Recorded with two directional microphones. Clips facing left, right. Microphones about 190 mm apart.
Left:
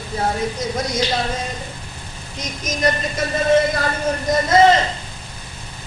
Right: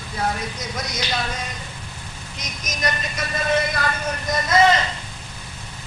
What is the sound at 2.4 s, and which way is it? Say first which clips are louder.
Speech: left 7 dB; 30° left (ahead or behind).